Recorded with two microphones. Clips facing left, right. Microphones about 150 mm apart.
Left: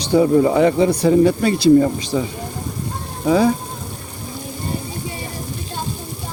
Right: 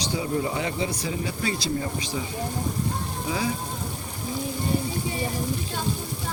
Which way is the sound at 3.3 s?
65° left (ahead or behind).